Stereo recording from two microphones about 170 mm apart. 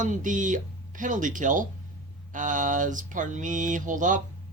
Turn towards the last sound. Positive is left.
turn(degrees=-50)  # may be behind; listen again after turning